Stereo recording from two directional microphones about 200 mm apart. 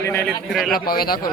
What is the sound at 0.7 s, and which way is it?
Speech, 50° left (ahead or behind).